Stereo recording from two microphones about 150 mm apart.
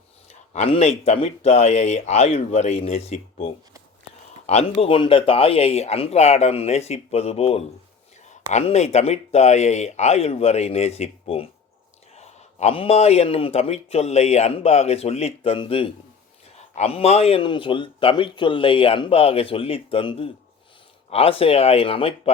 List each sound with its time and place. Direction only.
0.3 s a man's voice: 45° left (ahead or behind)